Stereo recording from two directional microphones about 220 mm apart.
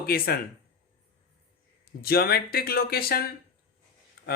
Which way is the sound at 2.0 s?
45° left (ahead or behind).